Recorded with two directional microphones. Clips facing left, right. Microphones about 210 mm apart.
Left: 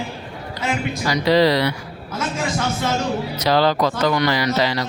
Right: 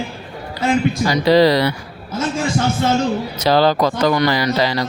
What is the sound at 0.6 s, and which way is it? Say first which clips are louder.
Speech: right 7 dB; 35° right (ahead or behind).